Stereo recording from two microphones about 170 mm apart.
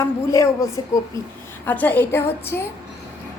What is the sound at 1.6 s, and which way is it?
A woman's voice, 10° left (ahead or behind).